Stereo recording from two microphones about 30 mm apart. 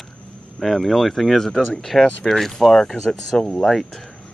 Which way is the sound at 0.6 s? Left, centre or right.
Centre.